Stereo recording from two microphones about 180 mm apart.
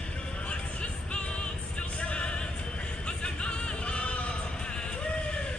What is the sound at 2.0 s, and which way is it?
Music, 5° left (ahead or behind).